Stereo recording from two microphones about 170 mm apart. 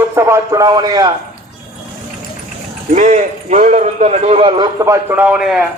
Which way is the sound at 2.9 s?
50° right (ahead or behind).